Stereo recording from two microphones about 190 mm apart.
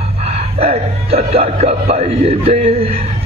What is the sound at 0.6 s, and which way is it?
A man's voice, 30° right (ahead or behind).